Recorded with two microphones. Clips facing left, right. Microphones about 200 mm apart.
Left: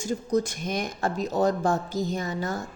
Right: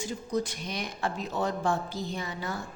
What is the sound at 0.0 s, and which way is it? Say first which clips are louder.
Speech: left 5 dB; 45° left (ahead or behind).